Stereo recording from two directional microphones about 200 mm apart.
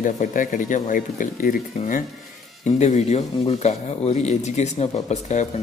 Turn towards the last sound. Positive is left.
turn(degrees=35)  # may be behind; listen again after turning